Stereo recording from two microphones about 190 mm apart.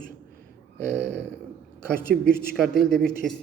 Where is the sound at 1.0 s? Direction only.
70° right (ahead or behind).